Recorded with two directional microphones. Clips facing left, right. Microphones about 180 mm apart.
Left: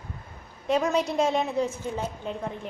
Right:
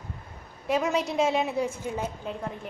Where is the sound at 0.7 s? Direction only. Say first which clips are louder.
Left 2 dB; 5° right (ahead or behind).